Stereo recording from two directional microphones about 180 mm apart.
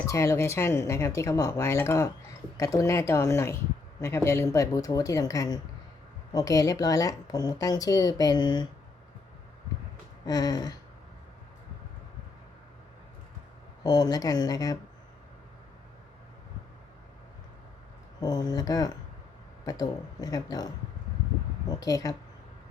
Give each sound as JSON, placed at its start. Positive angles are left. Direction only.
{"t": 0.1, "sound": "a woman's voice", "side_deg": 15}
{"t": 10.2, "sound": "a woman's voice", "side_deg": 20}
{"t": 13.8, "sound": "a woman's voice", "side_deg": 20}
{"t": 18.2, "sound": "a woman's voice", "side_deg": 20}